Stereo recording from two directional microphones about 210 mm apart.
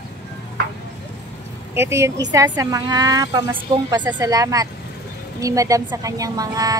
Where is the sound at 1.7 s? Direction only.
10° right (ahead or behind).